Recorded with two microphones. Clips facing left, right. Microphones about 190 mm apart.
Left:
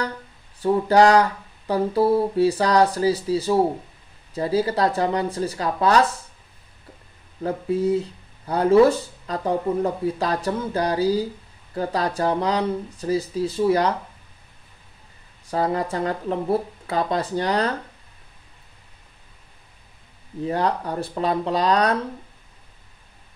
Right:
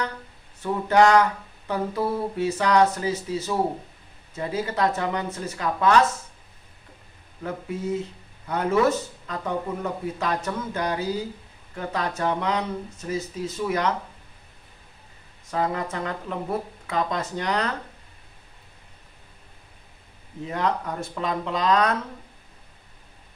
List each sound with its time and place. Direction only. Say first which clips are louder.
0.6 s speech: left 3 dB; 35° left (ahead or behind)
7.4 s speech: left 7 dB; 35° left (ahead or behind)
15.4 s speech: left 3 dB; 35° left (ahead or behind)
20.4 s speech: left 3 dB; 35° left (ahead or behind)